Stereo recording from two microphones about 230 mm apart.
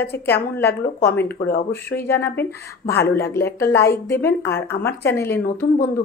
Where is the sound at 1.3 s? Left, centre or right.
Left.